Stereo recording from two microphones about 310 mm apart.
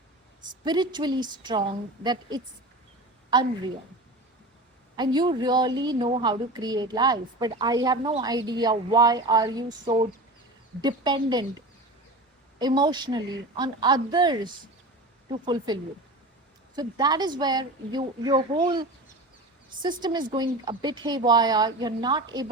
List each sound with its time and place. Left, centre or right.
0.6 s a woman's voice: centre
3.3 s a woman's voice: centre
4.9 s a woman's voice: centre
12.5 s a woman's voice: centre